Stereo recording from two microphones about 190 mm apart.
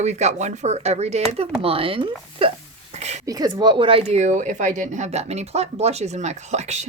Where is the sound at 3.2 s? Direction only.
20° right (ahead or behind).